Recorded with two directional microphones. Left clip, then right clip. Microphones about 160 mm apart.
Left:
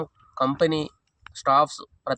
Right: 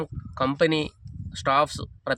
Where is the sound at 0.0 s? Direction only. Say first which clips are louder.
Left 2 dB; 40° right (ahead or behind).